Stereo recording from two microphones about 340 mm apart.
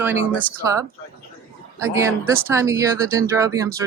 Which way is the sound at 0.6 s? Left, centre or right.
Centre.